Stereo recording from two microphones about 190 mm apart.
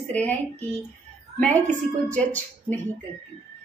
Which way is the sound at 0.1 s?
5° left (ahead or behind).